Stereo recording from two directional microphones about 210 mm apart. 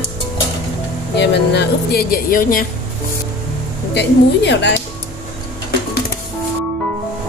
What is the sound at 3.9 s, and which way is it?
Speech, 55° left (ahead or behind).